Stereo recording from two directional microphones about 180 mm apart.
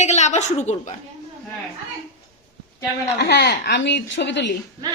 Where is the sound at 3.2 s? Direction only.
65° left (ahead or behind).